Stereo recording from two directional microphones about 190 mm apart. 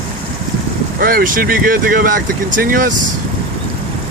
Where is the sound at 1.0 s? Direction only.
50° right (ahead or behind).